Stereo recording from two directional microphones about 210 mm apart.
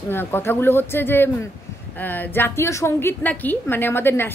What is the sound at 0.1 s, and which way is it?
A woman's voice, 10° left (ahead or behind).